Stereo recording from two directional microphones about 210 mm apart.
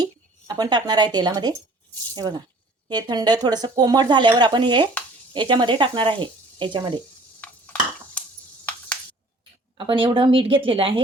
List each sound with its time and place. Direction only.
0.0 s speech: 20° right (ahead or behind)
7.4 s a sound: 5° left (ahead or behind)
9.7 s speech: 25° right (ahead or behind)